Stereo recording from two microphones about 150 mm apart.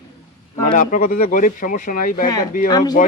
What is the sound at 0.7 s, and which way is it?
Speech, 65° left (ahead or behind).